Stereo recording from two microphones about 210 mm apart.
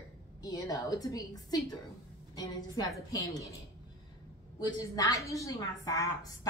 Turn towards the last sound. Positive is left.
turn(degrees=15)  # may be behind; listen again after turning